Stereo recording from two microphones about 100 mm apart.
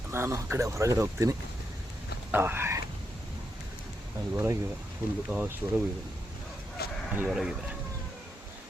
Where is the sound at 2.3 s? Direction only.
20° right (ahead or behind).